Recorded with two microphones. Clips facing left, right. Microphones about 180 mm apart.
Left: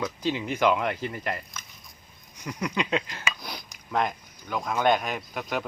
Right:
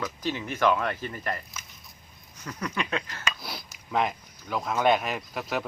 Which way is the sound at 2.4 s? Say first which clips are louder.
Left 3 dB; 15° left (ahead or behind).